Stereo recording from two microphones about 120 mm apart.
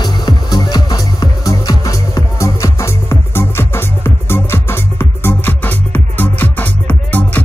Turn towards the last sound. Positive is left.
turn(degrees=15)  # may be behind; listen again after turning